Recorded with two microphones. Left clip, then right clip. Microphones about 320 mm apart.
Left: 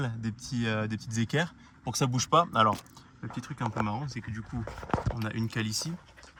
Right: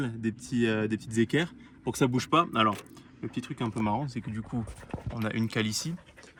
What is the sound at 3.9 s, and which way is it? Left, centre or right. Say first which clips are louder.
Speech: right 5 dB; right.